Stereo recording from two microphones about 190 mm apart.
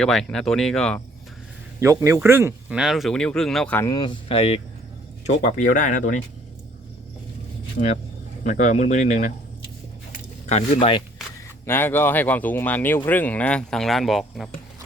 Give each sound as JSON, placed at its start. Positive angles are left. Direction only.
{"t": 0.0, "sound": "speech", "side_deg": 0}
{"t": 1.8, "sound": "speech", "side_deg": -15}
{"t": 7.8, "sound": "speech", "side_deg": 50}
{"t": 10.5, "sound": "speech", "side_deg": 35}
{"t": 11.6, "sound": "speech", "side_deg": 10}